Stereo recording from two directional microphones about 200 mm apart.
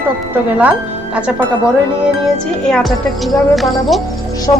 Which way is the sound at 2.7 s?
5° left (ahead or behind).